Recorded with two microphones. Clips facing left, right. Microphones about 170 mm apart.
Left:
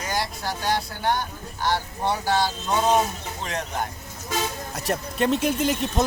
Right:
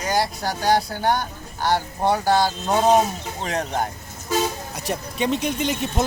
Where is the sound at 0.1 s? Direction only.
40° right (ahead or behind).